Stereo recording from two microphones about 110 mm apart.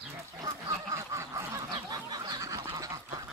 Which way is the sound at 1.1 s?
35° right (ahead or behind).